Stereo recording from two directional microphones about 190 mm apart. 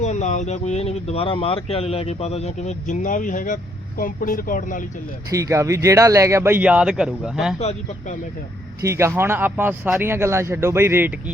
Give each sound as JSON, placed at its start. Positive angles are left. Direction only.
{"t": 0.0, "sound": "speech", "side_deg": 40}
{"t": 5.3, "sound": "speech", "side_deg": -15}
{"t": 7.6, "sound": "speech", "side_deg": 40}
{"t": 8.8, "sound": "speech", "side_deg": -15}